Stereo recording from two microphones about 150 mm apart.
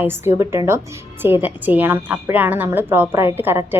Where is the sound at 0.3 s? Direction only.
20° right (ahead or behind).